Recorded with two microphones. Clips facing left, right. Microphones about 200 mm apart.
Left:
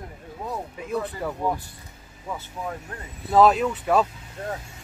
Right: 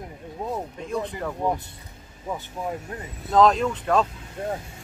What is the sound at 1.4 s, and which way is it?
Speech, 20° right (ahead or behind).